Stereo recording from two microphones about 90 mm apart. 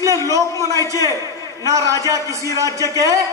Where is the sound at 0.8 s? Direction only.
40° left (ahead or behind).